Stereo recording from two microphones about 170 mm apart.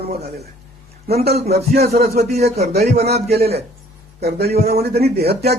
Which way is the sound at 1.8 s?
65° right (ahead or behind).